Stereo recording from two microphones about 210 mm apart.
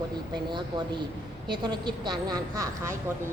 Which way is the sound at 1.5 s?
20° right (ahead or behind).